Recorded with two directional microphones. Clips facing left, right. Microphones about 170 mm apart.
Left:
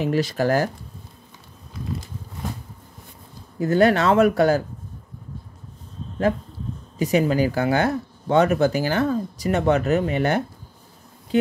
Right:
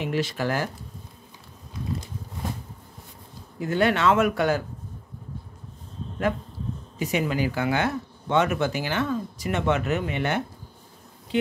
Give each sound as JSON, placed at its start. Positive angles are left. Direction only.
{"t": 0.0, "sound": "speech", "side_deg": 40}
{"t": 3.5, "sound": "speech", "side_deg": 40}
{"t": 7.0, "sound": "speech", "side_deg": 40}